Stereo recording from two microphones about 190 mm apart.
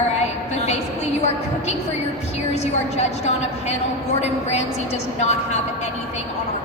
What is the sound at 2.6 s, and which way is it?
A woman's voice, 35° left (ahead or behind).